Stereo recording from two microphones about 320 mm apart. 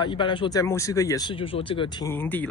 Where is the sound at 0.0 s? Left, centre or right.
Centre.